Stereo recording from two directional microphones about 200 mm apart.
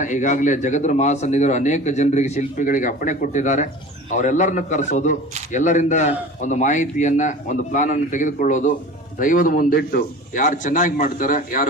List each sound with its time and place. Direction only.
0.0 s a man's voice: 40° left (ahead or behind)